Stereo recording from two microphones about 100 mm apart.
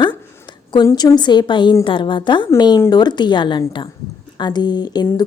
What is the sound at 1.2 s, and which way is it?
A woman's voice, 50° left (ahead or behind).